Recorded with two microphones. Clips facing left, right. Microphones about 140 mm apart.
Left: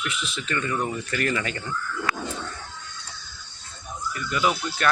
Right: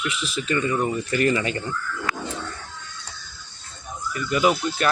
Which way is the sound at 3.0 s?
Centre (ahead or behind).